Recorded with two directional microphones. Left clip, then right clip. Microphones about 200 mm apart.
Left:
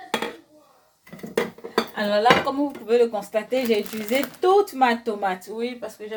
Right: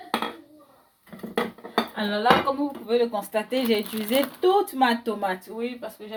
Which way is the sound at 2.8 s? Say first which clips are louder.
Left 4 dB; 20° left (ahead or behind).